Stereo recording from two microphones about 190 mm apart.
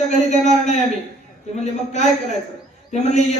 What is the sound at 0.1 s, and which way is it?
Speech, 40° left (ahead or behind).